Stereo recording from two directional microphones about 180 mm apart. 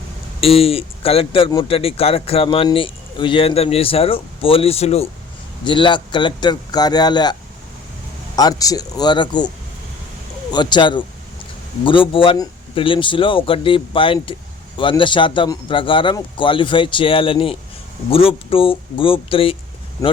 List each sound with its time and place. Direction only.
0.4 s a man's voice: 35° left (ahead or behind)
8.4 s a man's voice: 20° left (ahead or behind)
10.5 s a man's voice: 25° left (ahead or behind)
20.0 s speech: 15° left (ahead or behind)